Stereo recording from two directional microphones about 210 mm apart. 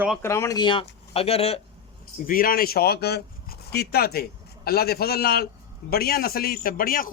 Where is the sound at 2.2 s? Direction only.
40° left (ahead or behind).